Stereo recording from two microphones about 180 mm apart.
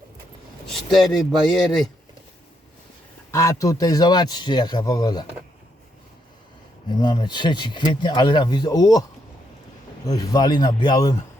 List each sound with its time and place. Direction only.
0.7 s speech: centre (ahead or behind)
3.3 s speech: 20° left (ahead or behind)
6.8 s speech: 25° left (ahead or behind)
10.1 s speech: 20° left (ahead or behind)